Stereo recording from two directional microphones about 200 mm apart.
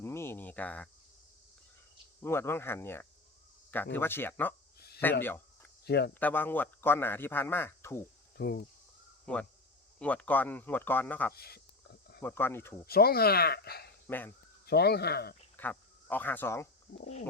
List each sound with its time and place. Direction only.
0.0 s a sound: 15° left (ahead or behind)
2.2 s a man's voice: 10° left (ahead or behind)
5.8 s speech: 55° left (ahead or behind)
6.1 s a man's voice: 10° left (ahead or behind)
8.4 s speech: 50° left (ahead or behind)
9.2 s a man's voice: 5° left (ahead or behind)
11.3 s speech: 50° left (ahead or behind)
12.2 s a man's voice: 10° left (ahead or behind)
12.8 s speech: 50° left (ahead or behind)
14.1 s a man's voice: 10° left (ahead or behind)
14.7 s speech: 55° left (ahead or behind)
15.5 s speech: 10° left (ahead or behind)